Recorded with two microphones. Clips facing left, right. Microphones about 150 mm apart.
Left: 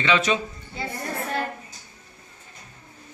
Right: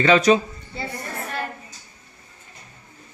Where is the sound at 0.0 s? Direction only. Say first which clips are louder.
Right 7 dB; 40° right (ahead or behind).